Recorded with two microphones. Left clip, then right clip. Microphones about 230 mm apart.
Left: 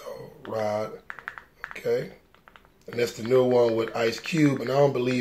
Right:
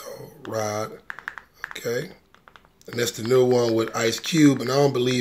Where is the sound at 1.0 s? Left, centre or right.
Right.